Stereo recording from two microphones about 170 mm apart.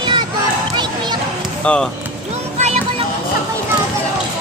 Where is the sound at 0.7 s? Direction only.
25° right (ahead or behind).